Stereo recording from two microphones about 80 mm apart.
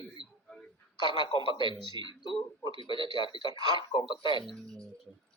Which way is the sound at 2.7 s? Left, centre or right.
Left.